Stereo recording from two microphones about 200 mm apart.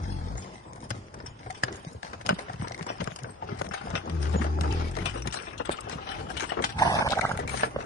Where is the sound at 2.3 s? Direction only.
90° left.